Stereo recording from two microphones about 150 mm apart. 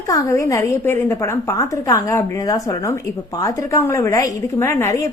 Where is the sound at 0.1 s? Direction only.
20° left (ahead or behind).